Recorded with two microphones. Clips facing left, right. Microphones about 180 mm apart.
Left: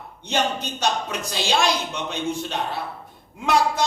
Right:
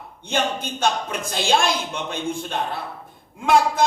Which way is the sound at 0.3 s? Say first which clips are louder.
Even; 50° right (ahead or behind).